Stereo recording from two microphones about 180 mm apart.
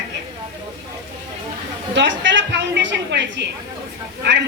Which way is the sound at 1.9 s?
85° right.